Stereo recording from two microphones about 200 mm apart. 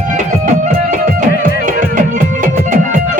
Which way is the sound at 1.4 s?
40° right (ahead or behind).